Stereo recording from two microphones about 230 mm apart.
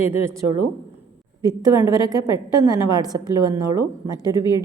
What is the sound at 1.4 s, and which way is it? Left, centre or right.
A woman's voice, centre.